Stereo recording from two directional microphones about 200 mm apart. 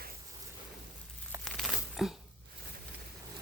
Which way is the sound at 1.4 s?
Centre (ahead or behind).